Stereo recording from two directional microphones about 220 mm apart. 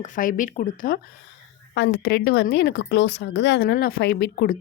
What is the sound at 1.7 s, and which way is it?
A woman's voice, 55° left (ahead or behind).